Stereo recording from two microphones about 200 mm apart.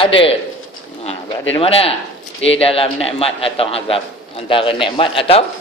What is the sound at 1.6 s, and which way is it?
A man's voice, 30° left (ahead or behind).